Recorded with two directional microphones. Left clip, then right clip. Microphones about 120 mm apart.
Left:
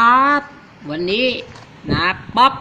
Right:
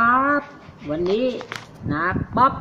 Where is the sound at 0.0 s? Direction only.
25° left (ahead or behind).